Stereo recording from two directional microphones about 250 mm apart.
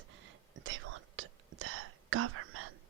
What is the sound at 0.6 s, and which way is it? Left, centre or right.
Whispering, right.